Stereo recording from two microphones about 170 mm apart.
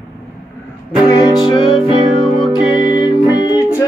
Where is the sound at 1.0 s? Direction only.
25° left (ahead or behind).